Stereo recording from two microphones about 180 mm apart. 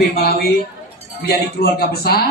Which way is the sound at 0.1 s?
60° left (ahead or behind).